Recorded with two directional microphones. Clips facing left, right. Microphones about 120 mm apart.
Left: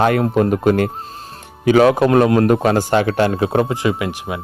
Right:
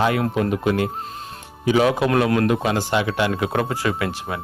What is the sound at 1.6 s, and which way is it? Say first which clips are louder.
Speech: left 6 dB; 65° left (ahead or behind).